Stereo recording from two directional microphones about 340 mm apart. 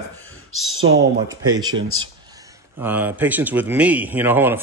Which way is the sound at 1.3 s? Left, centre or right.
Centre.